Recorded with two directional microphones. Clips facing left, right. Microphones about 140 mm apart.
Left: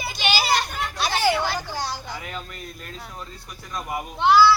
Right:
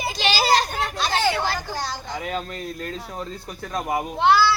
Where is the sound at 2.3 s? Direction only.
65° right (ahead or behind).